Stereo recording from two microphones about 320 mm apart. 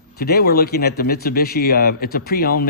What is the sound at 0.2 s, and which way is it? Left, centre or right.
Speech, left.